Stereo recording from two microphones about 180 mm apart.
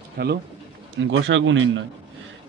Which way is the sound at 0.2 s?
60° right (ahead or behind).